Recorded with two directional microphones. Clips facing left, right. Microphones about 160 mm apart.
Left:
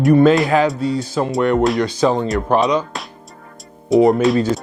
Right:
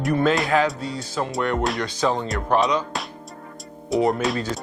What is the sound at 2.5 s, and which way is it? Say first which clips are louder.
Speech: left 4 dB; 10° left (ahead or behind).